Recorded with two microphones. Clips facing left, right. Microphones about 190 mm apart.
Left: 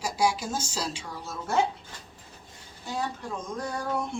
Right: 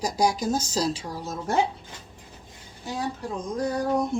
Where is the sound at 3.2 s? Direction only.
35° right (ahead or behind).